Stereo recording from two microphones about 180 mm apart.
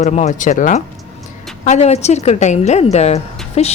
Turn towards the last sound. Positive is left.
turn(degrees=35)  # may be behind; listen again after turning